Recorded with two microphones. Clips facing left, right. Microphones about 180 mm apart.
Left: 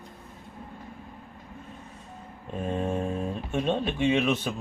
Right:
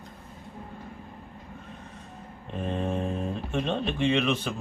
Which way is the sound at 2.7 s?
5° left (ahead or behind).